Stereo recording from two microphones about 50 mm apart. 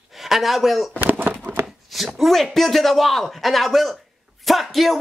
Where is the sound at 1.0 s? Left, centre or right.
Right.